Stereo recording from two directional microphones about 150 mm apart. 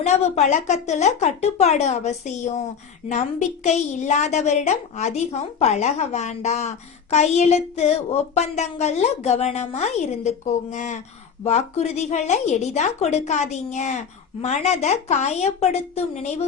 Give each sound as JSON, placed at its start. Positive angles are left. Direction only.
{"t": 0.0, "sound": "a woman's voice", "side_deg": 50}